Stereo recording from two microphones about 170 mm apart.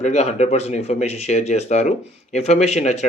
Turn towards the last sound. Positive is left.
turn(degrees=45)  # may be behind; listen again after turning